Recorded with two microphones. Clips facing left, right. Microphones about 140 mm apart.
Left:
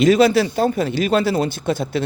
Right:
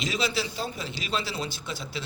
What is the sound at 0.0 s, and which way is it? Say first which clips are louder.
Speech: left 15 dB; 55° left (ahead or behind).